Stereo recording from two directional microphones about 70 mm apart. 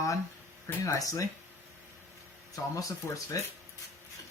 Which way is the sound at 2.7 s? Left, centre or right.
Left.